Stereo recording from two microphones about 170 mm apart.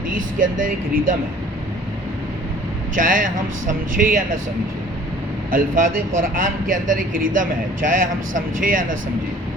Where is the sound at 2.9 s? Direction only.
50° right (ahead or behind).